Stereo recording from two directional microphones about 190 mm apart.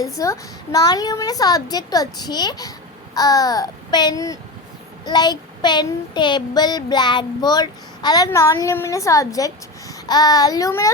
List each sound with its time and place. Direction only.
0.0 s child singing: 20° left (ahead or behind)